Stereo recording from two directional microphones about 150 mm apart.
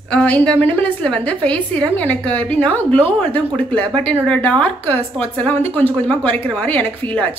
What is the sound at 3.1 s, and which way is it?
Speech, 35° right (ahead or behind).